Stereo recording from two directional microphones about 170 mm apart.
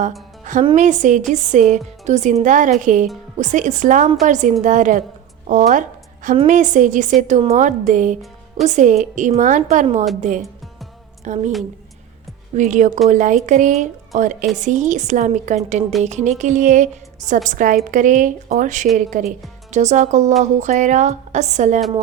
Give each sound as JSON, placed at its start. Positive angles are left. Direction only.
{"t": 0.5, "sound": "a woman's voice", "side_deg": -50}
{"t": 12.5, "sound": "a woman's voice", "side_deg": -45}